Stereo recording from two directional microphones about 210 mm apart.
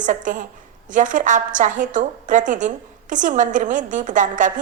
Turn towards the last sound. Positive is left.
turn(degrees=-40)  # may be behind; listen again after turning